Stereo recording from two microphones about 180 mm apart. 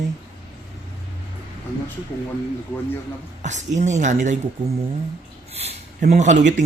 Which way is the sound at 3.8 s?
40° right (ahead or behind).